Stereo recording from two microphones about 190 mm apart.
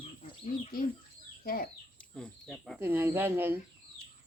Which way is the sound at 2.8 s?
10° right (ahead or behind).